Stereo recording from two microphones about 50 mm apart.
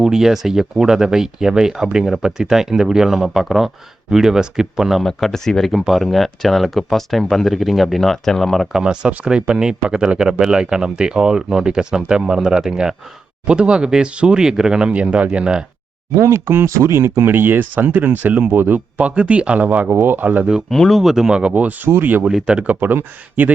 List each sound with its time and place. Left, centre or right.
0.0 s speech: centre
5.0 s speech: centre
8.7 s speech: centre
16.1 s speech: right
19.9 s speech: right
20.1 s speech: right
20.7 s speech: centre
21.0 s speech: centre
21.4 s speech: right
22.4 s speech: right
22.7 s speech: right